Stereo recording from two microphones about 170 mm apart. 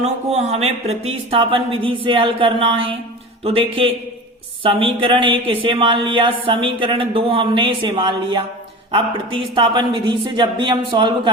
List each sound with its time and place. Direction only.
0.0 s speech: 40° right (ahead or behind)